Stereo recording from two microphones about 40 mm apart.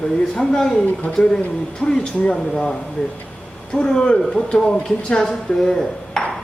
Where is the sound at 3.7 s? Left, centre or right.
Left.